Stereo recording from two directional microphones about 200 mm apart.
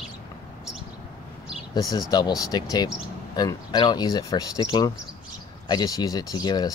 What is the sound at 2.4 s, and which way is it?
Speech, 20° left (ahead or behind).